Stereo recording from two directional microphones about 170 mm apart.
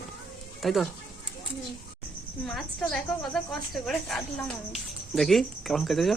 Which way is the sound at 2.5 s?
5° left (ahead or behind).